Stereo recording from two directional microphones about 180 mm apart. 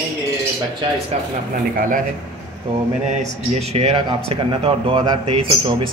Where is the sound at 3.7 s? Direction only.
35° right (ahead or behind).